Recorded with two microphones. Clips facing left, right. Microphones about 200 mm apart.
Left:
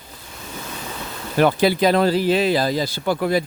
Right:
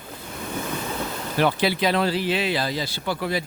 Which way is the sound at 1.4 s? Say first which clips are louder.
Left 5 dB; 45° left (ahead or behind).